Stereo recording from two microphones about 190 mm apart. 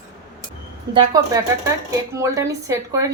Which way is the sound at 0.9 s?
20° right (ahead or behind).